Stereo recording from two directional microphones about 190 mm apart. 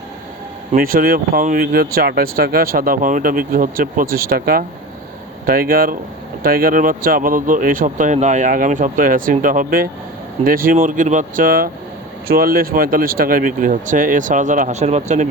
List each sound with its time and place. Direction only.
0.8 s speech: 50° right (ahead or behind)